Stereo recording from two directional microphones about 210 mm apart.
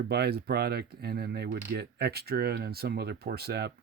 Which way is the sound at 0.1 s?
50° right (ahead or behind).